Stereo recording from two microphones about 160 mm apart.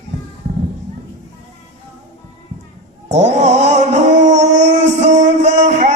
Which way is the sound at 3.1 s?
45° right (ahead or behind).